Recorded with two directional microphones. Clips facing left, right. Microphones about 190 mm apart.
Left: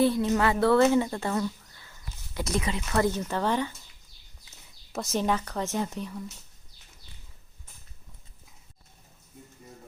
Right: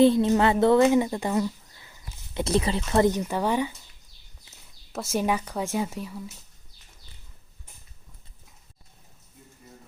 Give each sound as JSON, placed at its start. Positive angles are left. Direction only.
{"t": 0.0, "sound": "speech", "side_deg": -25}
{"t": 2.4, "sound": "speech", "side_deg": -30}
{"t": 4.5, "sound": "speech", "side_deg": 0}